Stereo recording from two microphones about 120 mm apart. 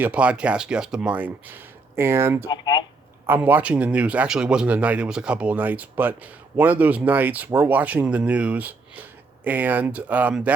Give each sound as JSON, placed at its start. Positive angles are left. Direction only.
{"t": 0.0, "sound": "speech", "side_deg": -10}
{"t": 2.5, "sound": "speech", "side_deg": 35}
{"t": 3.2, "sound": "speech", "side_deg": -15}